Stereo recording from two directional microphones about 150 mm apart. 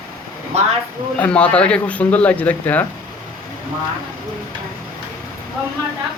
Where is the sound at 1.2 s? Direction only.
10° left (ahead or behind).